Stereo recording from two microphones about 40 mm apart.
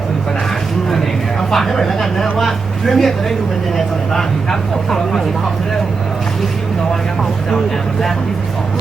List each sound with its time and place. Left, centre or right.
1.4 s speech: centre